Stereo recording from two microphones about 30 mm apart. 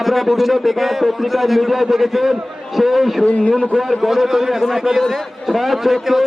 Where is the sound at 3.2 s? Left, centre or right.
Left.